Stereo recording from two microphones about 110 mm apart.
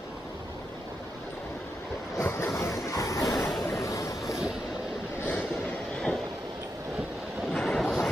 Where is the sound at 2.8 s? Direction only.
30° left (ahead or behind).